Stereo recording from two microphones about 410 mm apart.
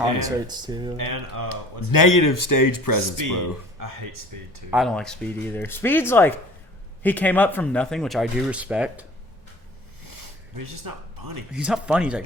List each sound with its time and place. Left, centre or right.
0.2 s speech: centre
0.9 s speech: right
1.9 s speech: left
4.7 s speech: centre
10.8 s speech: right
11.5 s speech: centre